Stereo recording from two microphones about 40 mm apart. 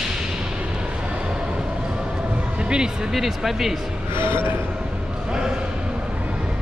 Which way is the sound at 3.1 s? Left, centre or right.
Centre.